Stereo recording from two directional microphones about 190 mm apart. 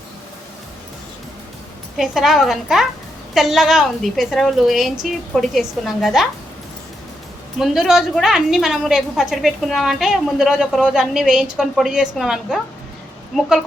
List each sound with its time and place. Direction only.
2.0 s a woman's voice: centre (ahead or behind)
7.6 s a woman's voice: centre (ahead or behind)